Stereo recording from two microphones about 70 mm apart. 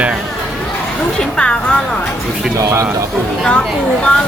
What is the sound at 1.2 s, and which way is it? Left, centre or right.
Speech, centre.